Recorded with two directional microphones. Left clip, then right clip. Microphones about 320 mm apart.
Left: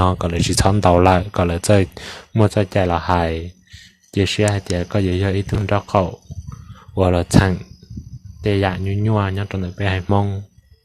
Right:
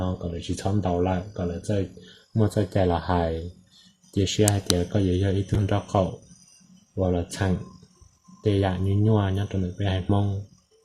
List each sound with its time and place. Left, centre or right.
0.0 s speech: left